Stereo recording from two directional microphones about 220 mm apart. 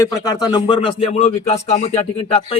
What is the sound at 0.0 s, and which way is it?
A man's voice, 20° left (ahead or behind).